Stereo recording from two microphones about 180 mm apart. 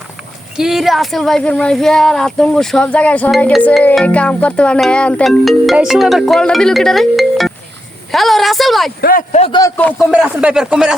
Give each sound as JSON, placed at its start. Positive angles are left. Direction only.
{"t": 0.5, "sound": "speech", "side_deg": 0}
{"t": 8.1, "sound": "a sound", "side_deg": 0}
{"t": 9.0, "sound": "speech", "side_deg": 55}
{"t": 9.3, "sound": "a man's voice", "side_deg": 35}
{"t": 9.6, "sound": "speech", "side_deg": 15}
{"t": 10.1, "sound": "speech", "side_deg": -5}